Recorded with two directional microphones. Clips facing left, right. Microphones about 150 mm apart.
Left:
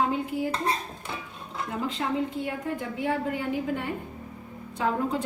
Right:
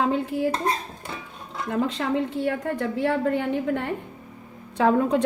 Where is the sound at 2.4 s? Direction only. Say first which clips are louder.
Right 6 dB; 80° right.